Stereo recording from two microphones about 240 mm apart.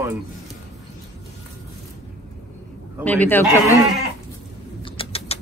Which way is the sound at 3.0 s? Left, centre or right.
Centre.